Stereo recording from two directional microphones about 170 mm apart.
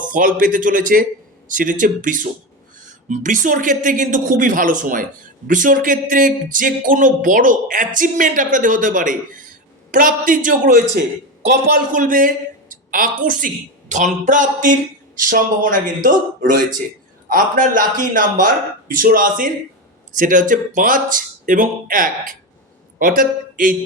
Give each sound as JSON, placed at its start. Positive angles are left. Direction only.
{"t": 0.1, "sound": "a man's voice", "side_deg": -50}